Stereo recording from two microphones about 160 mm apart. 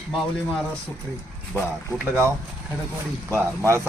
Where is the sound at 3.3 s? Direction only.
20° right (ahead or behind).